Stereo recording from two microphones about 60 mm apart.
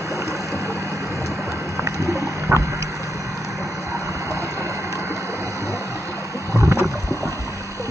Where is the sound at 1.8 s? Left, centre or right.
Right.